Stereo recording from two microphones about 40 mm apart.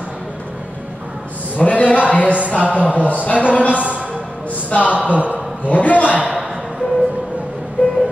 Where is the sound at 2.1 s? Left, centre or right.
Left.